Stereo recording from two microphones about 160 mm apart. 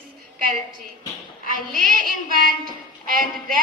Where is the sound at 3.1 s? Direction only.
65° right (ahead or behind).